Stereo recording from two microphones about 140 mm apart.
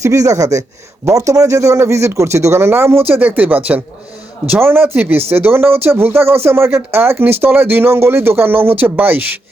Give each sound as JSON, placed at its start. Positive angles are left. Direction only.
{"t": 0.0, "sound": "speech", "side_deg": -25}